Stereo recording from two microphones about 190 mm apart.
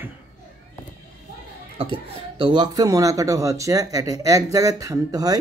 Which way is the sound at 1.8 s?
30° right (ahead or behind).